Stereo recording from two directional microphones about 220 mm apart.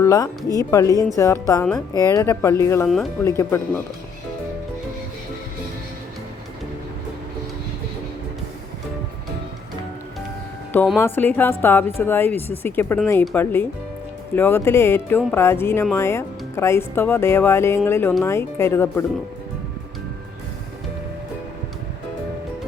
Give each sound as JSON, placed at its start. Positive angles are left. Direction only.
{"t": 0.0, "sound": "speech", "side_deg": 15}
{"t": 10.7, "sound": "speech", "side_deg": 5}